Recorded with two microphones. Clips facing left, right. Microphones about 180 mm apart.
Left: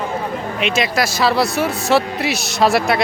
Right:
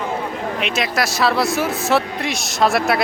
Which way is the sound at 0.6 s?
Centre (ahead or behind).